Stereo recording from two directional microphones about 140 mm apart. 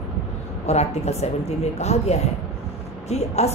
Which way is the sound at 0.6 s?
50° left (ahead or behind).